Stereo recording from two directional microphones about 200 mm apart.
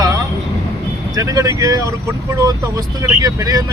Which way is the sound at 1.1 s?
15° right (ahead or behind).